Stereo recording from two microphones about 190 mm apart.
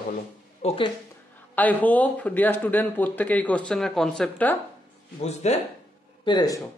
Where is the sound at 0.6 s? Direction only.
35° left (ahead or behind).